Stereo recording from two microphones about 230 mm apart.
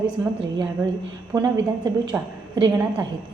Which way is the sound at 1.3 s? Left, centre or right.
Centre.